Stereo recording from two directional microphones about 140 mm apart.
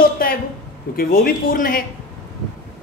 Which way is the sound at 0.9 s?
90° left.